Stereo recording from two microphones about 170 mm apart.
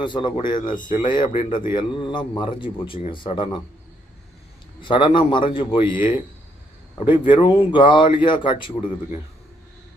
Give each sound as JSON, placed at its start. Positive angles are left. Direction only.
{"t": 0.0, "sound": "speech", "side_deg": 30}
{"t": 4.8, "sound": "speech", "side_deg": 30}
{"t": 7.0, "sound": "speech", "side_deg": 30}